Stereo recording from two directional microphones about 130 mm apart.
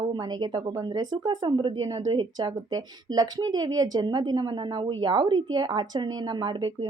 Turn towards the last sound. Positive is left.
turn(degrees=-35)  # may be behind; listen again after turning